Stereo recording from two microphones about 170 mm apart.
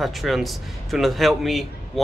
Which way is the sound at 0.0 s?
Centre (ahead or behind).